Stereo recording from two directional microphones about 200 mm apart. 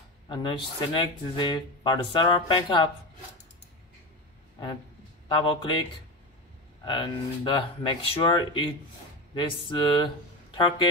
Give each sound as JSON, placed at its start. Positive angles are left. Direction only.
{"t": 0.3, "sound": "speech", "side_deg": 25}
{"t": 5.3, "sound": "speech", "side_deg": 25}